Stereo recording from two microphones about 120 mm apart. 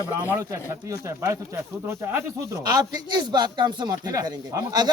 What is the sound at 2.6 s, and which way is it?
A man's voice, 30° right (ahead or behind).